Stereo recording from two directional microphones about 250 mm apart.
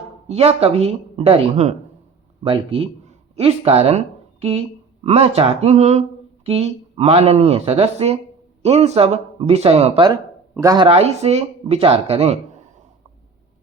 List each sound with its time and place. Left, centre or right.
0.3 s speech: right